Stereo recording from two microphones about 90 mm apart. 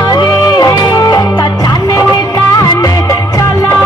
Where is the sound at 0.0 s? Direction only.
45° left (ahead or behind).